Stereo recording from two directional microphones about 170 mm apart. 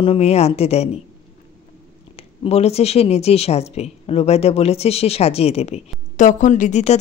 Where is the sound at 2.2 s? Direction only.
35° left (ahead or behind).